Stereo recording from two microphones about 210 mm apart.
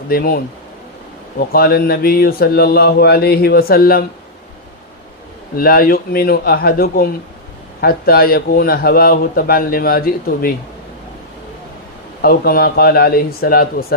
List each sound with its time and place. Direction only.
0.1 s a man's voice: 45° left (ahead or behind)
1.5 s a man's voice: 45° left (ahead or behind)
5.5 s a man's voice: 45° left (ahead or behind)
12.2 s a man's voice: 45° left (ahead or behind)